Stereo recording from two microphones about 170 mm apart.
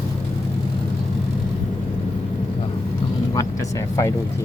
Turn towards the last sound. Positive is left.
turn(degrees=20)  # may be behind; listen again after turning